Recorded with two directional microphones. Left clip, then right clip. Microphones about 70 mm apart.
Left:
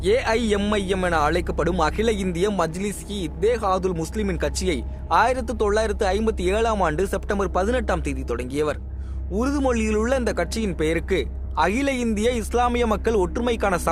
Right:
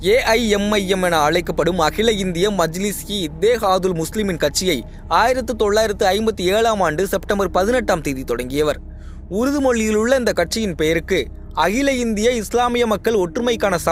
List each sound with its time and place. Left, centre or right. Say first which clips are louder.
0.0 s speech: right 5 dB; right
0.7 s speech: right 5 dB; right
1.0 s a man's voice: right 5 dB; right
5.0 s speech: right 3 dB; right
9.3 s a man's voice: right 5 dB; right
13.1 s a man's voice: right 4 dB; right